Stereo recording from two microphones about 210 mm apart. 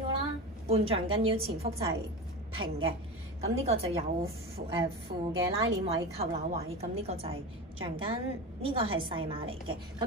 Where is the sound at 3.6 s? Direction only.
30° right (ahead or behind).